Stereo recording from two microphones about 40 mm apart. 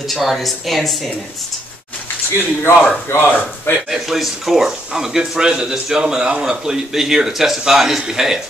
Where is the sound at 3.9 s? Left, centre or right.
Centre.